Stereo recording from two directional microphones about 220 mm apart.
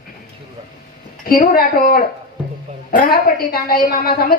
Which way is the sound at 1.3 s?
45° left (ahead or behind).